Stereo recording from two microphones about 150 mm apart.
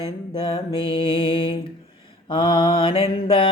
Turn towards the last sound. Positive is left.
turn(degrees=35)  # may be behind; listen again after turning